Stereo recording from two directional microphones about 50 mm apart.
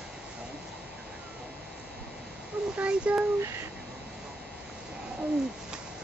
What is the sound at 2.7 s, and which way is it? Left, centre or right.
Speech, right.